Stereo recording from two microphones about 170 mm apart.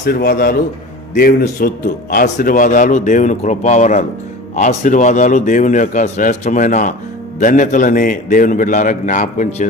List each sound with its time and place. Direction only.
0.0 s a man's voice: 60° left (ahead or behind)